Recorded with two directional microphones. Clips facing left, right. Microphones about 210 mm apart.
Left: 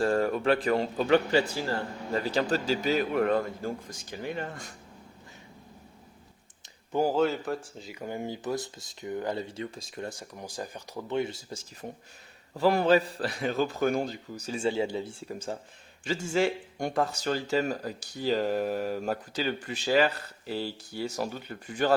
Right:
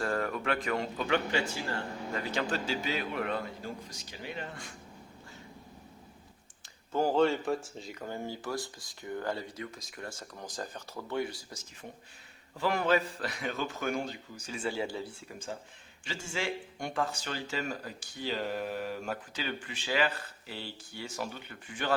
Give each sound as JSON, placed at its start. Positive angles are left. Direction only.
{"t": 0.0, "sound": "a man's voice", "side_deg": 30}
{"t": 6.9, "sound": "speech", "side_deg": 5}
{"t": 8.0, "sound": "speech", "side_deg": 15}
{"t": 10.1, "sound": "speech", "side_deg": 15}
{"t": 12.5, "sound": "speech", "side_deg": 35}
{"t": 15.3, "sound": "speech", "side_deg": 40}